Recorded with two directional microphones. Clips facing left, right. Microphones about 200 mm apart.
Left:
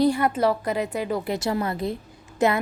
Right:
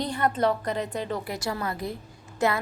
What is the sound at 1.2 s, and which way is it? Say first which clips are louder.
A woman's voice: left 5 dB; 25° left (ahead or behind).